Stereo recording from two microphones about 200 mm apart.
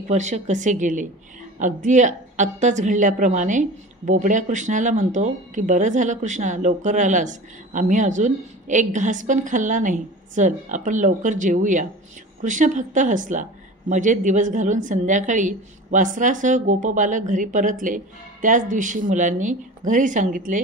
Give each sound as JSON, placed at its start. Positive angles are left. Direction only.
{"t": 0.1, "sound": "a woman's voice", "side_deg": -35}